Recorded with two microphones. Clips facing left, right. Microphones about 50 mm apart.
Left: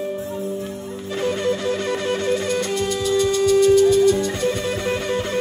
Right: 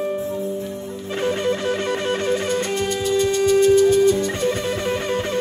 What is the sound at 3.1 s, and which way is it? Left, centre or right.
Music, right.